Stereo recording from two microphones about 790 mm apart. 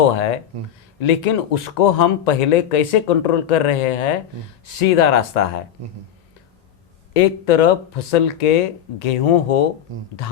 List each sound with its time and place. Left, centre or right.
0.0 s speech: left
7.1 s speech: left